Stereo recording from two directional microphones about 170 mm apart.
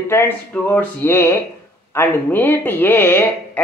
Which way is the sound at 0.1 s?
15° left (ahead or behind).